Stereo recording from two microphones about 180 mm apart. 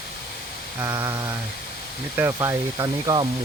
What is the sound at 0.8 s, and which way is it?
Speech, 20° right (ahead or behind).